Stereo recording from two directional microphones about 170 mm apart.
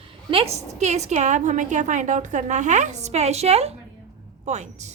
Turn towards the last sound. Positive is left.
turn(degrees=-40)  # may be behind; listen again after turning